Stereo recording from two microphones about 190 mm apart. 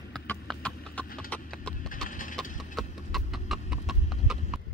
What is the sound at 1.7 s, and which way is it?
Clip-clop, 45° left (ahead or behind).